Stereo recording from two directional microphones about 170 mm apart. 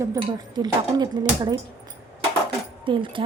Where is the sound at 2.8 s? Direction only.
30° right (ahead or behind).